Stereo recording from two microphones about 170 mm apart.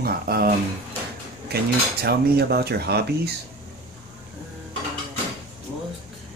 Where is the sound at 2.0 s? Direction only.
65° right (ahead or behind).